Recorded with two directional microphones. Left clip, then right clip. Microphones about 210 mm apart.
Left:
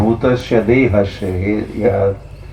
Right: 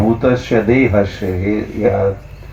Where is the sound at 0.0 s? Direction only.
45° right (ahead or behind).